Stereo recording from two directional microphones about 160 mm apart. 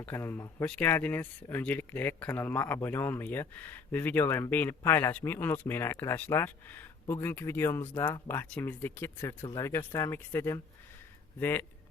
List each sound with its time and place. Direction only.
0.0 s speech: 15° left (ahead or behind)